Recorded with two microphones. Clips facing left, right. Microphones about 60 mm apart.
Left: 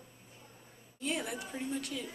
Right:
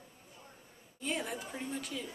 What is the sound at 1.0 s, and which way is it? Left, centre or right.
A woman's voice, centre.